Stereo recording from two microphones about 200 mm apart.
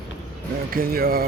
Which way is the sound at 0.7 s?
50° right (ahead or behind).